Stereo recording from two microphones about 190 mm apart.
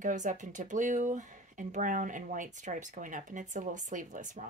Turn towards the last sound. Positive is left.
turn(degrees=-40)  # may be behind; listen again after turning